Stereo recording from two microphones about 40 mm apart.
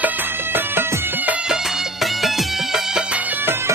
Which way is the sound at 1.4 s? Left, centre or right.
Centre.